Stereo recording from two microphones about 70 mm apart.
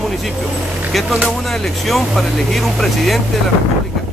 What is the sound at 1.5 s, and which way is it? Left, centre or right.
Speech, centre.